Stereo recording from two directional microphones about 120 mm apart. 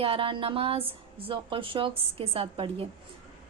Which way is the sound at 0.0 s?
50° right (ahead or behind).